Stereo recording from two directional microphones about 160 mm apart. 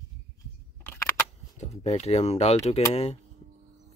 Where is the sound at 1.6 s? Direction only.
40° left (ahead or behind).